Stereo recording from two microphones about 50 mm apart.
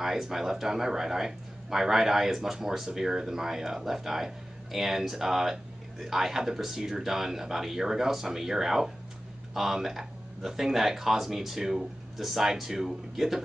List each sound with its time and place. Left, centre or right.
0.0 s speech: centre